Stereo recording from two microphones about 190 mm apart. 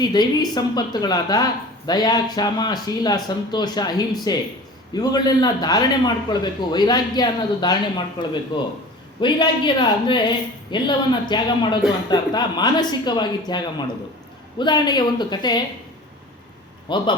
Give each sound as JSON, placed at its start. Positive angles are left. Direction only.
{"t": 0.0, "sound": "a woman's voice", "side_deg": 20}
{"t": 16.9, "sound": "a woman's voice", "side_deg": 25}